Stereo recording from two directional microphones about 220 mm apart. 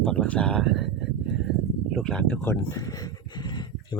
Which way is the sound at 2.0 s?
5° left (ahead or behind).